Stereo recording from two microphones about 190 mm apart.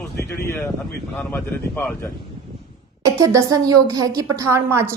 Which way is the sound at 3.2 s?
15° right (ahead or behind).